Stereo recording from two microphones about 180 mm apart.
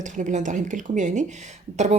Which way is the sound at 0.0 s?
45° right (ahead or behind).